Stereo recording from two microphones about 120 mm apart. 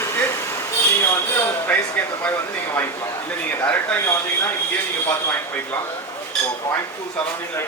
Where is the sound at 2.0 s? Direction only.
15° left (ahead or behind).